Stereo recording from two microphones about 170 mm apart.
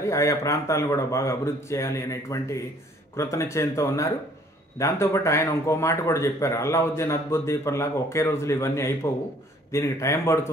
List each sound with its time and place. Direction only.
0.0 s speech: 20° left (ahead or behind)